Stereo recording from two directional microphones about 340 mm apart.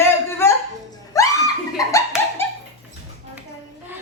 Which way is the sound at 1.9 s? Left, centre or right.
Centre.